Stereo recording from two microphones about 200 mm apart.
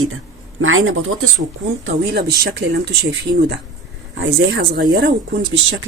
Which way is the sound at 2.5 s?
55° right (ahead or behind).